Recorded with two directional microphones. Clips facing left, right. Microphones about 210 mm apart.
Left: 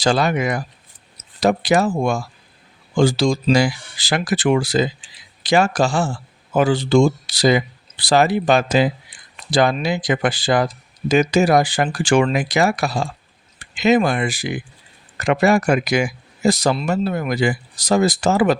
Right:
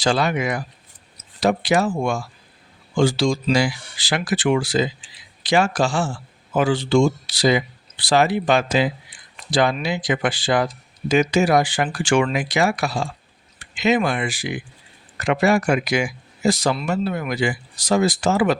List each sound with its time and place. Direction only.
0.0 s speech: 40° left (ahead or behind)